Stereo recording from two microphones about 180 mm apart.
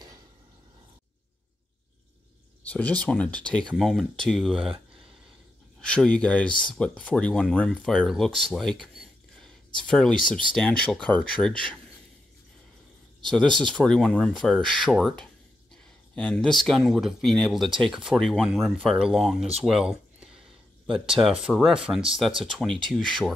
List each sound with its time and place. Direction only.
2.7 s speech: 10° left (ahead or behind)
5.8 s speech: 5° left (ahead or behind)
13.2 s speech: centre (ahead or behind)